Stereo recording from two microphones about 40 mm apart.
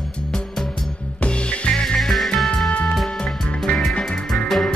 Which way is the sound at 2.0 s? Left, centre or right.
Centre.